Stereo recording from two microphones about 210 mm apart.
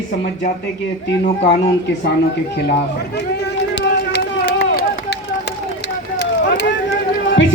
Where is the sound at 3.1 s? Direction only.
50° left (ahead or behind).